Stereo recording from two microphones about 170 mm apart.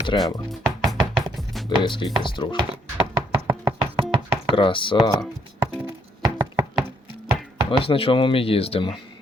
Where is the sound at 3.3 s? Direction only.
30° right (ahead or behind).